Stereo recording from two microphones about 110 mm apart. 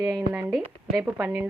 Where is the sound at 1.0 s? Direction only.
15° right (ahead or behind).